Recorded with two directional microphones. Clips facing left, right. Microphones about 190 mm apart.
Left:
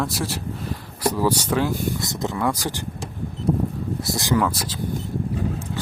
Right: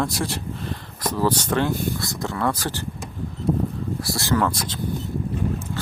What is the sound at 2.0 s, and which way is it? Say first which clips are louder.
Speech: left 1 dB; 20° left (ahead or behind).